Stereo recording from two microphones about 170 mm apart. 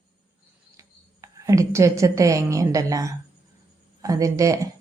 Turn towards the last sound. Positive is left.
turn(degrees=-20)  # may be behind; listen again after turning